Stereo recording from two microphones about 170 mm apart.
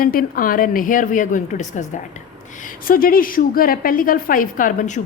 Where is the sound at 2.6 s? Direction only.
60° left (ahead or behind).